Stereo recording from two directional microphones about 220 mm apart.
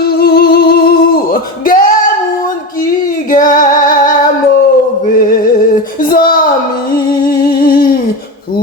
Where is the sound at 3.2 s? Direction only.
40° left (ahead or behind).